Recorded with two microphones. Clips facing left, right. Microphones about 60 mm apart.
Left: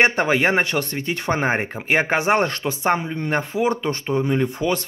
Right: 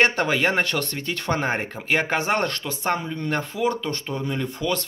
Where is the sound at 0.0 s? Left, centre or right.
Centre.